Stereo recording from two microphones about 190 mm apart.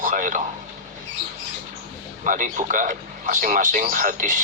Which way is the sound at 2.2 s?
45° right (ahead or behind).